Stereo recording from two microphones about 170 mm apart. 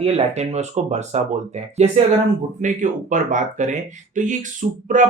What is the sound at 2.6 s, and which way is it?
Speech, 45° right (ahead or behind).